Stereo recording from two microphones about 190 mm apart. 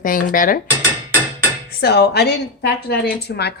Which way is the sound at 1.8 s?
60° left (ahead or behind).